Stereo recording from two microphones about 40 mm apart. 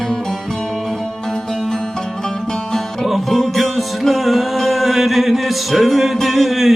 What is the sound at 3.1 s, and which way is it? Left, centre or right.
Music, centre.